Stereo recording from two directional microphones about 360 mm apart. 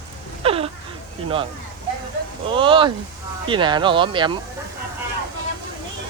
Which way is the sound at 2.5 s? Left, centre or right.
Centre.